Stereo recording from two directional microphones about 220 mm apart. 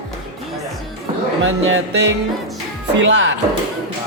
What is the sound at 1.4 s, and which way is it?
Speech, 60° right (ahead or behind).